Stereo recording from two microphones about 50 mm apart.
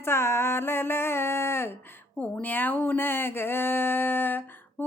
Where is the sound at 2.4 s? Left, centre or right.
Left.